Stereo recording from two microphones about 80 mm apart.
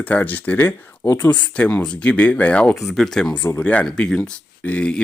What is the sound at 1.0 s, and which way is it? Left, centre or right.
Speech, left.